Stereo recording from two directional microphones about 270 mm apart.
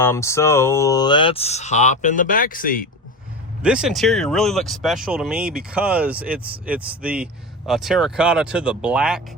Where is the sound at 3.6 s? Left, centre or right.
Centre.